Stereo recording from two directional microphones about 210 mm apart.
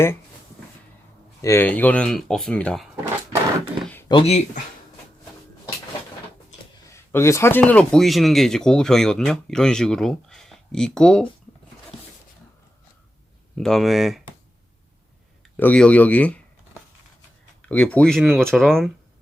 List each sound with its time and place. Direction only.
1.4 s speech: 15° left (ahead or behind)
4.1 s speech: 30° left (ahead or behind)
6.9 s speech: 10° left (ahead or behind)
13.6 s speech: centre (ahead or behind)
15.5 s speech: 5° left (ahead or behind)
17.6 s speech: 5° left (ahead or behind)